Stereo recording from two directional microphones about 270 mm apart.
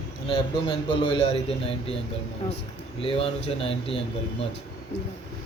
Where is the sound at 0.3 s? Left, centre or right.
Centre.